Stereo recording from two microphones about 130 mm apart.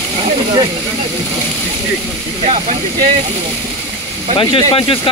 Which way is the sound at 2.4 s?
65° right (ahead or behind).